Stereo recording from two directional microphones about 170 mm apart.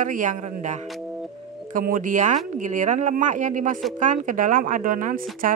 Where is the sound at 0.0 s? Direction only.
50° right (ahead or behind).